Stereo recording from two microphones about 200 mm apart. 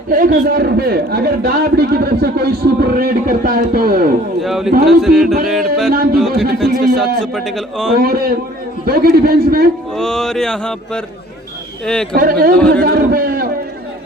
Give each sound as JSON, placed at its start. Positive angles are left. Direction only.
{"t": 0.1, "sound": "a man's voice", "side_deg": -45}
{"t": 4.4, "sound": "mantra", "side_deg": 0}
{"t": 8.0, "sound": "a man's voice", "side_deg": -50}
{"t": 9.9, "sound": "mantra", "side_deg": 0}
{"t": 12.1, "sound": "a man's voice", "side_deg": -50}
{"t": 12.5, "sound": "mantra", "side_deg": 5}
{"t": 12.8, "sound": "a sound", "side_deg": -50}